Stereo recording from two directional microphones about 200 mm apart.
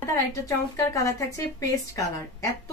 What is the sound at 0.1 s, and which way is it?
Speech, 15° left (ahead or behind).